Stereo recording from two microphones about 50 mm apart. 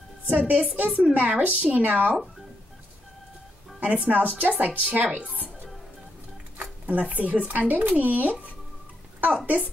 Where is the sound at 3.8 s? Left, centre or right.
Right.